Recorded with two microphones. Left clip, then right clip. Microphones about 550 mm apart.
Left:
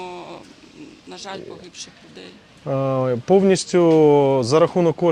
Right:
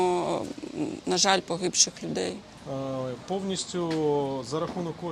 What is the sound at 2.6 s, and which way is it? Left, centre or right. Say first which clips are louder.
Speech: left 12 dB; left.